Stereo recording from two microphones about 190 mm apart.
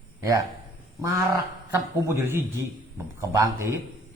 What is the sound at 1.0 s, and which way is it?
A man's voice, 15° right (ahead or behind).